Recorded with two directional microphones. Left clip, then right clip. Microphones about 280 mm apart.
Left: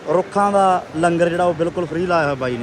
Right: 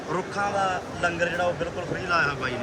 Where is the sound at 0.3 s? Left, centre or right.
Left.